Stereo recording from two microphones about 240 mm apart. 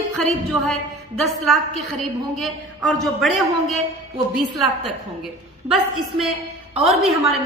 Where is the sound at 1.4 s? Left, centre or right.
Centre.